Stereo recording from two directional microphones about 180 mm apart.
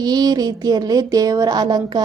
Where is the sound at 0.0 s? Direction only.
20° right (ahead or behind).